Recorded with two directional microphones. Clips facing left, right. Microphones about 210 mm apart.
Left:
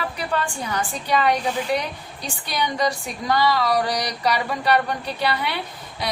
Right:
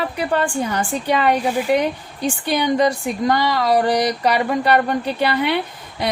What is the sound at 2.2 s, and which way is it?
Speech, 55° right (ahead or behind).